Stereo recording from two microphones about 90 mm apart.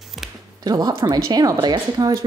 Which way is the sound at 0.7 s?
50° right (ahead or behind).